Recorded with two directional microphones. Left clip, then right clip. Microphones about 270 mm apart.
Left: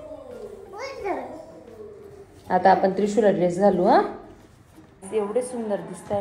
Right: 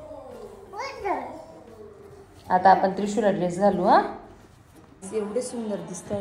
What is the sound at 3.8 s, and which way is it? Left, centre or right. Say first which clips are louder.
Speech: right 1 dB; right.